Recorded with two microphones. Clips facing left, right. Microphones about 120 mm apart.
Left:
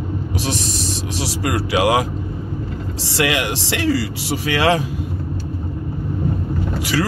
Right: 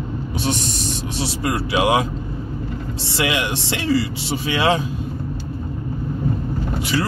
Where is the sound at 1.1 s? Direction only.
90° left.